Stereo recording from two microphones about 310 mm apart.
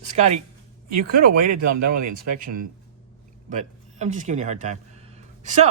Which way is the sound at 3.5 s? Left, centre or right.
Right.